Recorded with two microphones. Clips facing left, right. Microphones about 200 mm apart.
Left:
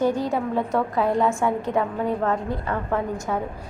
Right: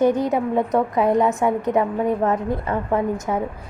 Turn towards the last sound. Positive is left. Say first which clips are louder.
# right 4 dB
turn(degrees=-20)  # may be behind; listen again after turning